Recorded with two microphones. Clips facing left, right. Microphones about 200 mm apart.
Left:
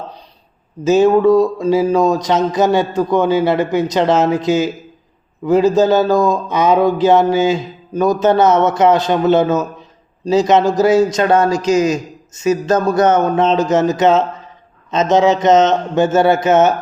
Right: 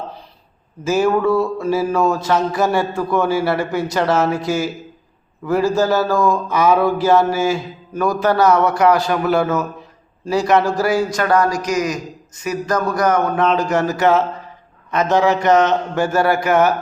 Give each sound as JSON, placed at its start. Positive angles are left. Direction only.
{"t": 0.9, "sound": "speech", "side_deg": 20}